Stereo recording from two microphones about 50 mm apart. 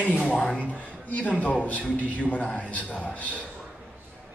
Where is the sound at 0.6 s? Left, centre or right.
Left.